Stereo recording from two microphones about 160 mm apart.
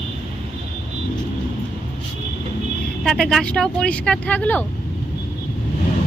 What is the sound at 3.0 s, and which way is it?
Speech, centre (ahead or behind).